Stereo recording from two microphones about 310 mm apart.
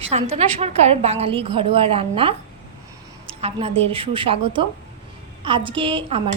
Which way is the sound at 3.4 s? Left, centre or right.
Centre.